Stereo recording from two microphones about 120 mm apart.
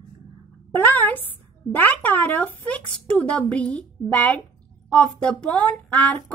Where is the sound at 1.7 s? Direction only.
15° left (ahead or behind).